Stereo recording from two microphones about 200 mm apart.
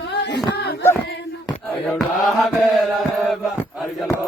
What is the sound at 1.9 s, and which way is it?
Mantra, centre (ahead or behind).